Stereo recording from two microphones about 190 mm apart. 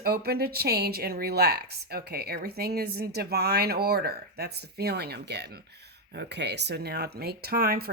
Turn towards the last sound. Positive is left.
turn(degrees=-55)  # may be behind; listen again after turning